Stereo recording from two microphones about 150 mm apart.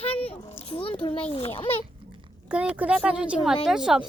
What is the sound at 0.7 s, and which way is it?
A child's voice, 35° left (ahead or behind).